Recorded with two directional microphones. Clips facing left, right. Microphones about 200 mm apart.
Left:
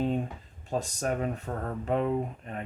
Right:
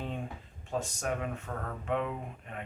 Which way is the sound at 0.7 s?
35° left (ahead or behind).